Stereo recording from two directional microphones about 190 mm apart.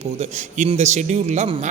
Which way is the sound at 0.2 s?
35° right (ahead or behind).